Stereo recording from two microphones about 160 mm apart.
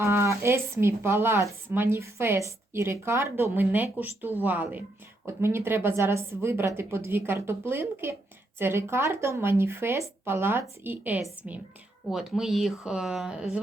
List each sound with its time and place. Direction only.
0.0 s speech: 20° right (ahead or behind)